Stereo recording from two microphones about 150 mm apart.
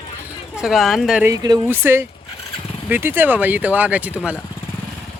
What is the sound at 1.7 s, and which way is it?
Speech, 15° right (ahead or behind).